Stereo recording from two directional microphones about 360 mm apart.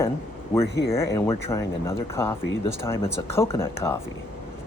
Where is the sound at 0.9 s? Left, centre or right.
Centre.